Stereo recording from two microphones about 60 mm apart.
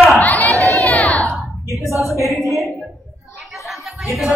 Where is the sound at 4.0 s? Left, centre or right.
Centre.